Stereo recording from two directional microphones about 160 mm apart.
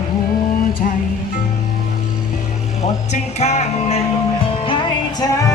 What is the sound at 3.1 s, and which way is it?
Music, 45° left (ahead or behind).